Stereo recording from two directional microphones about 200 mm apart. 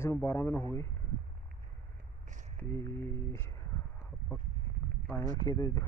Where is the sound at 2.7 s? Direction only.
10° left (ahead or behind).